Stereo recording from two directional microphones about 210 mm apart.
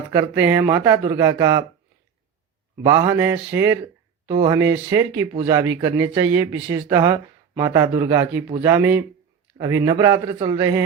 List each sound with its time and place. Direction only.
0.1 s speech: 10° right (ahead or behind)
2.8 s speech: 15° right (ahead or behind)